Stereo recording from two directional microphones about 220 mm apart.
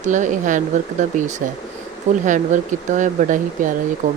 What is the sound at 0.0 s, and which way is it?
Speech, 35° right (ahead or behind).